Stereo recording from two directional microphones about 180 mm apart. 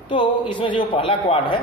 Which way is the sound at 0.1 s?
25° left (ahead or behind).